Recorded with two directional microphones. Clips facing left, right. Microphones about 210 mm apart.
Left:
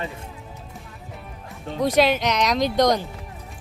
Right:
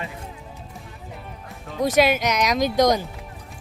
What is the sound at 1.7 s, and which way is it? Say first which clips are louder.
Speech: even; 5° right (ahead or behind).